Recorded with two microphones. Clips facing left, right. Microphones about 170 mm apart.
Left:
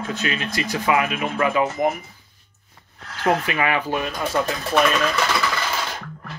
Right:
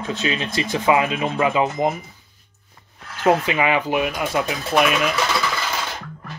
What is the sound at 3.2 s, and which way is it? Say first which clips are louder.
Speech: right 3 dB; 20° right (ahead or behind).